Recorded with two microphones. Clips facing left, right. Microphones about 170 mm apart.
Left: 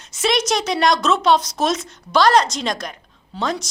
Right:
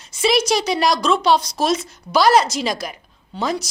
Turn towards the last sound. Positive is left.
turn(degrees=-5)  # may be behind; listen again after turning